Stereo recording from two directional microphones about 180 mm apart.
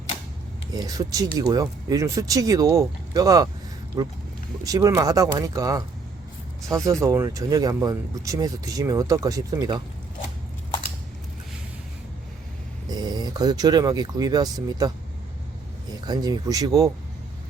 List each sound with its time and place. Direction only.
0.7 s speech: 20° right (ahead or behind)
12.9 s speech: 20° right (ahead or behind)